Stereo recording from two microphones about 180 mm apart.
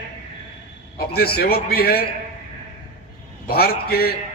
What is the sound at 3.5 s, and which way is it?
Speech, 60° left (ahead or behind).